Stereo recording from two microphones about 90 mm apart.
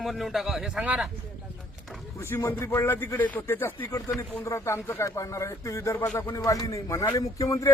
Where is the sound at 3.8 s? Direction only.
40° left (ahead or behind).